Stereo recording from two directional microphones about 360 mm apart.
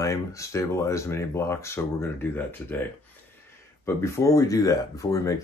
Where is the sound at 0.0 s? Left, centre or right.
Centre.